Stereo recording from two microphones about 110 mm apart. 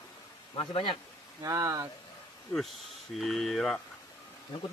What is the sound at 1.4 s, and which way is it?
Speech, 35° right (ahead or behind).